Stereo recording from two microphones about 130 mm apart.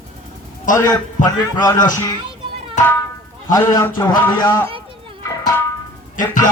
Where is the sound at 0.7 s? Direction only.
30° left (ahead or behind).